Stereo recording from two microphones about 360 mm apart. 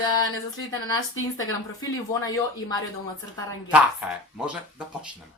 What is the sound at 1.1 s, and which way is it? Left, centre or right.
Speech, left.